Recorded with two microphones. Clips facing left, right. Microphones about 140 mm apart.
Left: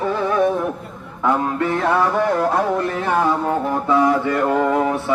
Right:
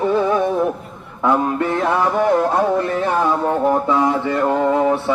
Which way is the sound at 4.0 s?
25° right (ahead or behind).